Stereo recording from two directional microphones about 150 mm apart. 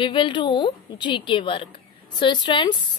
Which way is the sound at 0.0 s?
35° left (ahead or behind).